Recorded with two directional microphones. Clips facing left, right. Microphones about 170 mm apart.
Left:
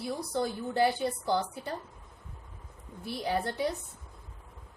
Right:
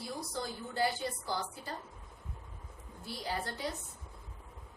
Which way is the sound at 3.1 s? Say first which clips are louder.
Left 7 dB; 60° left (ahead or behind).